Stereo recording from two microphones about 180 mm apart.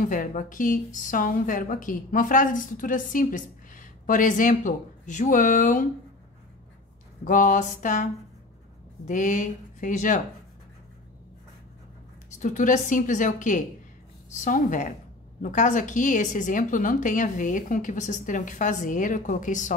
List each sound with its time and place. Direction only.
0.0 s a woman's voice: 45° left (ahead or behind)
7.2 s a woman's voice: 45° left (ahead or behind)
12.4 s a woman's voice: 45° left (ahead or behind)